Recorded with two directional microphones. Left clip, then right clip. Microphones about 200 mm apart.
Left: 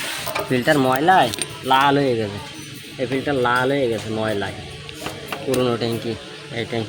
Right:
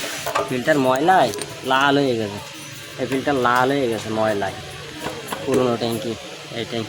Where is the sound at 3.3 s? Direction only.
10° left (ahead or behind).